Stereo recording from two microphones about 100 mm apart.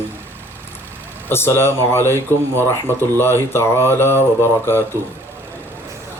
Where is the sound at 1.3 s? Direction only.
25° left (ahead or behind).